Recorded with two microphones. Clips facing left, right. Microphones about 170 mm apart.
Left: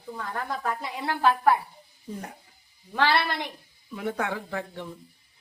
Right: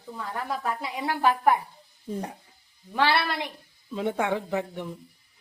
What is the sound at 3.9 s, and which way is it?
Speech, 25° right (ahead or behind).